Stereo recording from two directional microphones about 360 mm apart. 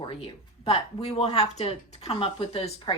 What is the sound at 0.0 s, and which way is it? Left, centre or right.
Speech, centre.